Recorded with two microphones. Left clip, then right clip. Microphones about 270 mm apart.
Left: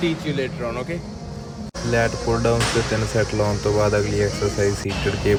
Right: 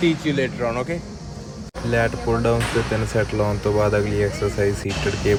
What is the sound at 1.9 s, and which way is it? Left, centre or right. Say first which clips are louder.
Speech: even; centre.